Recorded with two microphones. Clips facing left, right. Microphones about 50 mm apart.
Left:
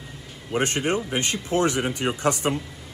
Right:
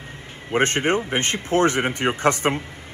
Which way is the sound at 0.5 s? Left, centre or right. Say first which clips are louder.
Right 4 dB; right.